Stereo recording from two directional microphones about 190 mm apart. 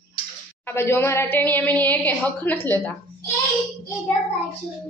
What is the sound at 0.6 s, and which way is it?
A woman's voice, 15° left (ahead or behind).